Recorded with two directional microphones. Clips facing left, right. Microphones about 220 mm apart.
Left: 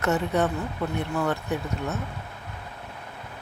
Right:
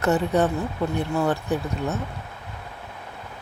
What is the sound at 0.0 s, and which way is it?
Speech, 35° right (ahead or behind).